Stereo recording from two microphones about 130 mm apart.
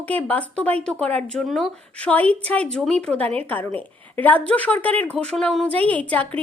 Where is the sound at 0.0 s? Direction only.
10° left (ahead or behind).